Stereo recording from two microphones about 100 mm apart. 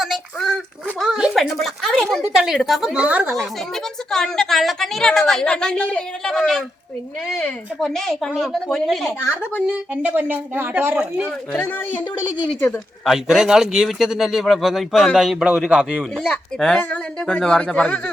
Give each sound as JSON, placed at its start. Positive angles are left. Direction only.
{"t": 0.0, "sound": "a woman's voice", "side_deg": 0}
{"t": 3.3, "sound": "a woman's voice", "side_deg": 5}
{"t": 9.2, "sound": "speech", "side_deg": 15}
{"t": 9.6, "sound": "speech", "side_deg": -15}
{"t": 11.3, "sound": "speech", "side_deg": 10}
{"t": 11.8, "sound": "a woman's voice", "side_deg": 20}
{"t": 12.5, "sound": "speech", "side_deg": 10}
{"t": 13.1, "sound": "a woman's voice", "side_deg": -5}
{"t": 16.1, "sound": "speech", "side_deg": 5}